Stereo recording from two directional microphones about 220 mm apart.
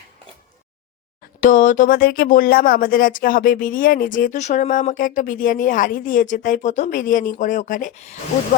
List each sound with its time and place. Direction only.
1.4 s speech: 35° left (ahead or behind)